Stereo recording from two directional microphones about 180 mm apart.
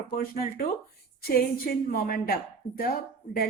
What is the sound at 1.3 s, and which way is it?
A woman's voice, 55° left (ahead or behind).